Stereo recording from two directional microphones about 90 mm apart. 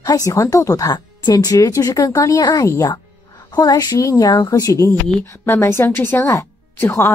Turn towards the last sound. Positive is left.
turn(degrees=30)  # may be behind; listen again after turning